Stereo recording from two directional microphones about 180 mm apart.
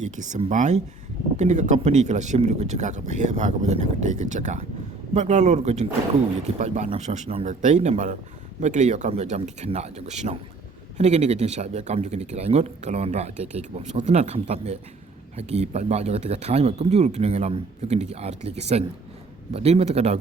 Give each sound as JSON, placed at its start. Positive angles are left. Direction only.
{"t": 0.0, "sound": "speech", "side_deg": -45}